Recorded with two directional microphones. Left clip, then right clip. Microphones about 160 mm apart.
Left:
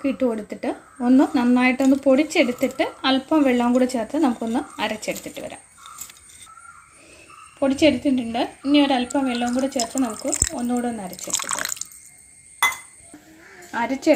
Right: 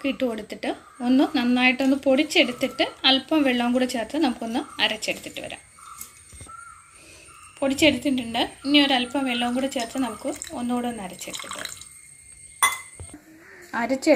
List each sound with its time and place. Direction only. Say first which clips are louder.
0.0 s a woman's voice: left 3 dB; 45° left (ahead or behind)
7.6 s a woman's voice: left 2 dB; 40° left (ahead or behind)
11.3 s a woman's voice: left 10 dB; 55° left (ahead or behind)
13.7 s speech: left 1 dB; 10° left (ahead or behind)